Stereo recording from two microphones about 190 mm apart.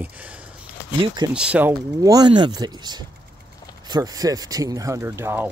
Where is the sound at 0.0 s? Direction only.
5° right (ahead or behind).